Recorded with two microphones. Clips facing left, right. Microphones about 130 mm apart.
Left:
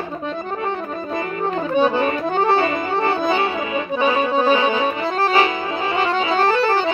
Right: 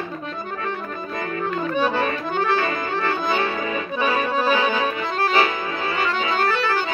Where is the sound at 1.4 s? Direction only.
25° left (ahead or behind).